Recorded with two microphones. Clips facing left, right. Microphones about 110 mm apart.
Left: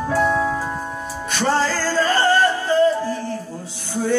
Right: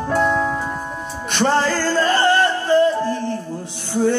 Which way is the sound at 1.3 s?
20° right (ahead or behind).